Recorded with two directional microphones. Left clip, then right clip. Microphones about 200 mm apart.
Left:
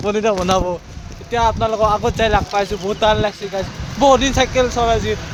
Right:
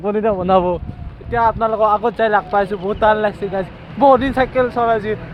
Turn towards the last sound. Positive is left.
turn(degrees=-5)  # may be behind; listen again after turning